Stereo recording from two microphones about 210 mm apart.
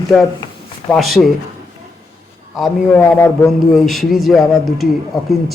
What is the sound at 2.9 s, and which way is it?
Speech, 10° left (ahead or behind).